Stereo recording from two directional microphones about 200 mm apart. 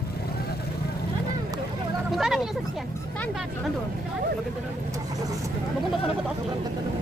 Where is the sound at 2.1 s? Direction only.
Centre (ahead or behind).